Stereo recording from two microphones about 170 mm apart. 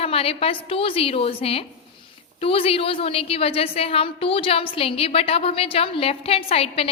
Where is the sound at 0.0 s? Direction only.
35° left (ahead or behind).